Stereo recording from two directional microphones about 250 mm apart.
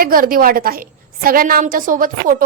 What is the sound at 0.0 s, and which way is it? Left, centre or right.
A woman's voice, right.